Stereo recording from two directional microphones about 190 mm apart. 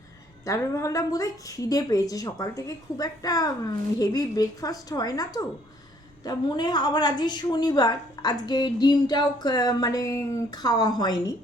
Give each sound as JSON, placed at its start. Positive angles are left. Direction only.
{"t": 0.4, "sound": "a woman's voice", "side_deg": 15}